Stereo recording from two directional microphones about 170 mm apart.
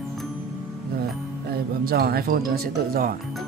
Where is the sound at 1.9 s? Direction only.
65° right (ahead or behind).